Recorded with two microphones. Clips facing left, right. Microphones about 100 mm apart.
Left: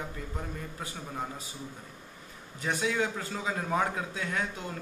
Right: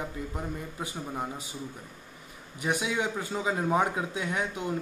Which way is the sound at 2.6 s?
15° right (ahead or behind).